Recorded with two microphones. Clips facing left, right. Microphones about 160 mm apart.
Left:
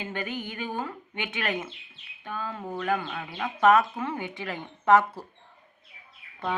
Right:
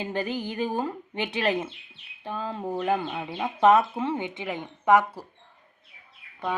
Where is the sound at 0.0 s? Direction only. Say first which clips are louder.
Right 4 dB; 35° right (ahead or behind); by 5.2 s 15° right (ahead or behind).